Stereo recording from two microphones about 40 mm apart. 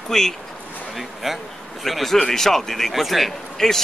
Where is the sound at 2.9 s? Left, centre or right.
Centre.